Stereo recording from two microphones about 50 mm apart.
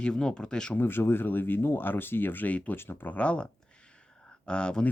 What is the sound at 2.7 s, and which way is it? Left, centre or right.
Speech, left.